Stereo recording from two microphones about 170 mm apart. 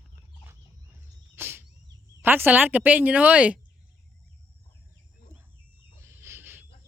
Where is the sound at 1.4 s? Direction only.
15° right (ahead or behind).